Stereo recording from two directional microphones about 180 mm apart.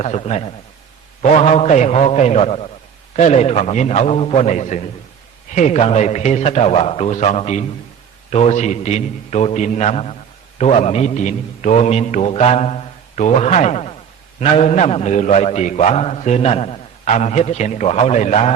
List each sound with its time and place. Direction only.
0.0 s a man's voice: 40° left (ahead or behind)